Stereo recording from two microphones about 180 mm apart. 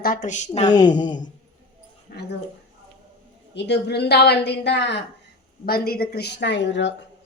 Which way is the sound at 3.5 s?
75° left (ahead or behind).